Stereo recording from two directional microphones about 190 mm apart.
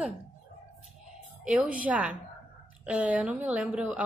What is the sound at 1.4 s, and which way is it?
Speech, 5° right (ahead or behind).